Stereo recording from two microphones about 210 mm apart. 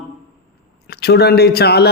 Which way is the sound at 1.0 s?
50° left (ahead or behind).